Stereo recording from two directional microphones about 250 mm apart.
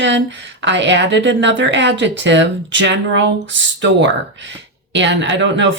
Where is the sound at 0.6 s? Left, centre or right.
Right.